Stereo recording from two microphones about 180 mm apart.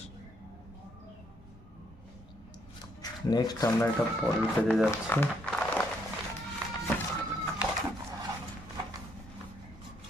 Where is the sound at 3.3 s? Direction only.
20° left (ahead or behind).